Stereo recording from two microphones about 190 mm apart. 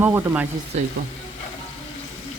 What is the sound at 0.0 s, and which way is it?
Speech, 10° right (ahead or behind).